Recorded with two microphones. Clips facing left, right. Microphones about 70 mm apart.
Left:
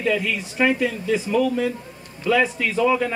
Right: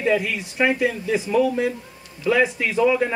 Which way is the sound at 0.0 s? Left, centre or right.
Right.